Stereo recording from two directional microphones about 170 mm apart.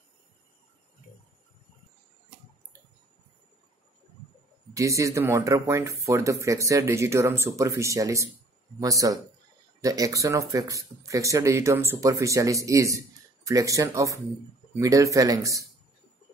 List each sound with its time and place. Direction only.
4.7 s speech: 20° right (ahead or behind)